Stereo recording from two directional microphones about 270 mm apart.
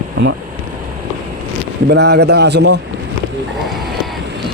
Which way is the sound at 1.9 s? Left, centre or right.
Right.